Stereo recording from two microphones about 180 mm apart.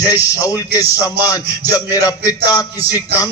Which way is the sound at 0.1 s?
20° left (ahead or behind).